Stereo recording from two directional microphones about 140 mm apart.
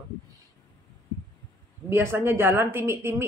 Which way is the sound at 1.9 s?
20° right (ahead or behind).